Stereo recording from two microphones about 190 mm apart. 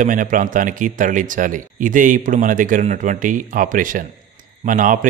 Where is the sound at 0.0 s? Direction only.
45° right (ahead or behind).